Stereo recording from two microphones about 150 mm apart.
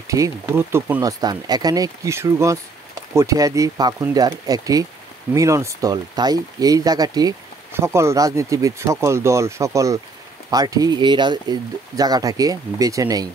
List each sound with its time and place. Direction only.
0.1 s speech: 20° right (ahead or behind)
1.2 s speech: 25° right (ahead or behind)